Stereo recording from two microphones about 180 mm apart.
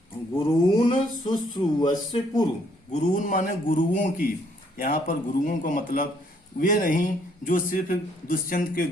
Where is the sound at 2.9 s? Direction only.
40° left (ahead or behind).